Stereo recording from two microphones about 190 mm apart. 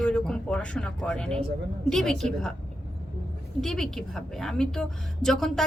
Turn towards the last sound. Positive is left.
turn(degrees=0)  # may be behind; listen again after turning